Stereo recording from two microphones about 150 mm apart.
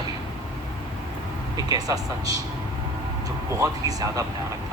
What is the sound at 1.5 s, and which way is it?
Speech, 25° right (ahead or behind).